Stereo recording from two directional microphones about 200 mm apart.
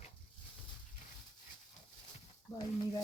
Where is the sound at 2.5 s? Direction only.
20° left (ahead or behind).